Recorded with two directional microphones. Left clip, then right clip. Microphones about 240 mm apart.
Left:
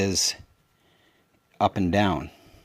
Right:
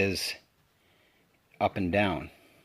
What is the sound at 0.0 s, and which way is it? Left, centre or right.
Speech, left.